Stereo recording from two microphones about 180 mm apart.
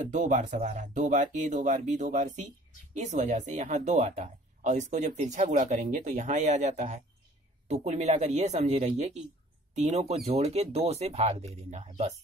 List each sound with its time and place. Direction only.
0.1 s speech: 45° right (ahead or behind)